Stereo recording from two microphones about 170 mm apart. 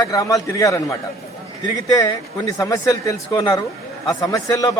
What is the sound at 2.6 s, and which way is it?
A man's voice, 20° left (ahead or behind).